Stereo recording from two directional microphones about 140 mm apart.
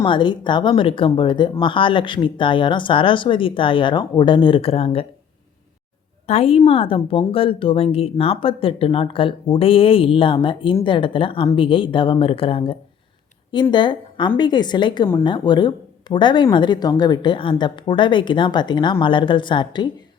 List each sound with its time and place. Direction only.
0.0 s speech: 35° left (ahead or behind)
6.2 s speech: 45° left (ahead or behind)